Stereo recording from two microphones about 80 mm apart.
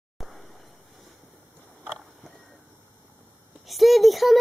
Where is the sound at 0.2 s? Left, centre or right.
Centre.